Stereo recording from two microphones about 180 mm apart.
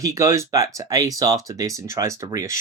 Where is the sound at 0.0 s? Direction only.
15° right (ahead or behind).